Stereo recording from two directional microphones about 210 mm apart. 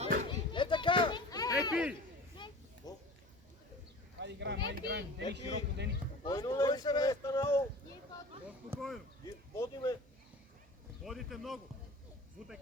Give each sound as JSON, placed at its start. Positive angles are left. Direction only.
{"t": 0.0, "sound": "children playing", "side_deg": -35}
{"t": 0.3, "sound": "children playing", "side_deg": 20}
{"t": 1.7, "sound": "a man's voice", "side_deg": -5}
{"t": 2.8, "sound": "a sound", "side_deg": 20}
{"t": 4.2, "sound": "speech", "side_deg": -55}
{"t": 6.2, "sound": "speech", "side_deg": 20}
{"t": 8.4, "sound": "a sound", "side_deg": -5}
{"t": 9.2, "sound": "a sound", "side_deg": 15}
{"t": 11.0, "sound": "a man's voice", "side_deg": 0}